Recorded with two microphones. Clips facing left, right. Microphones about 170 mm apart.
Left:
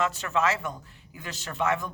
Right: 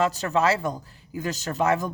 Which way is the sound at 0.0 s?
35° right (ahead or behind).